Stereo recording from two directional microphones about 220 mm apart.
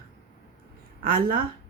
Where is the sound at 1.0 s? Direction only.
40° right (ahead or behind).